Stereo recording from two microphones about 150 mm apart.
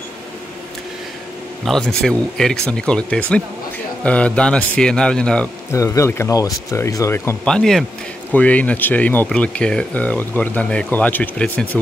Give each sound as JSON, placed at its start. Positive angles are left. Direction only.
{"t": 1.6, "sound": "speech", "side_deg": 5}
{"t": 5.7, "sound": "speech", "side_deg": 20}
{"t": 7.4, "sound": "speech", "side_deg": 5}